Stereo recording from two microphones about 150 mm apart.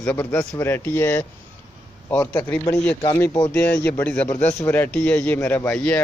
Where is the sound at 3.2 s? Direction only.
20° left (ahead or behind).